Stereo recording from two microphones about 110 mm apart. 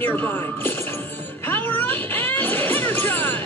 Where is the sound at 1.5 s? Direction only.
15° left (ahead or behind).